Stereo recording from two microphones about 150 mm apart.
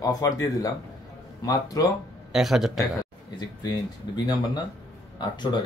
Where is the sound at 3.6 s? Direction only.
25° left (ahead or behind).